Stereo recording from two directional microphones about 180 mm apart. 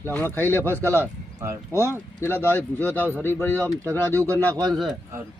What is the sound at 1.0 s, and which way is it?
Speech, 15° right (ahead or behind).